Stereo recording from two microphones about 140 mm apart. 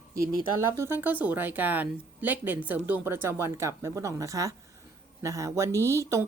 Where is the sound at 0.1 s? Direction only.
25° right (ahead or behind).